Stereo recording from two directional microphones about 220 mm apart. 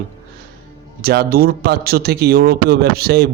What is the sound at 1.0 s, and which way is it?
Speech, 45° right (ahead or behind).